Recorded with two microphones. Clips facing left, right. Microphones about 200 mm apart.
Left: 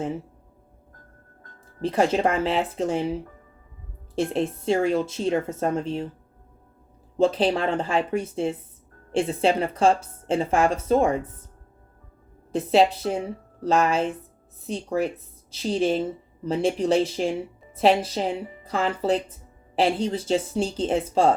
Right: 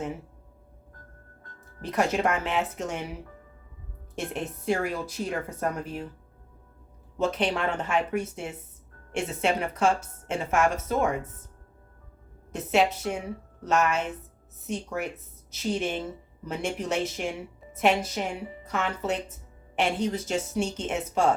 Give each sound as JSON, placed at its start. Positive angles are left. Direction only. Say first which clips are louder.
{"t": 1.8, "sound": "a woman's voice", "louder": "left 4 dB", "side_deg": 30}
{"t": 7.2, "sound": "a woman's voice", "louder": "left 6 dB", "side_deg": 30}
{"t": 12.5, "sound": "a woman's voice", "louder": "left 5 dB", "side_deg": 30}